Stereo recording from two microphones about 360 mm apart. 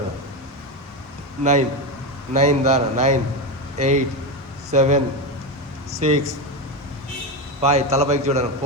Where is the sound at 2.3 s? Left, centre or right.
Centre.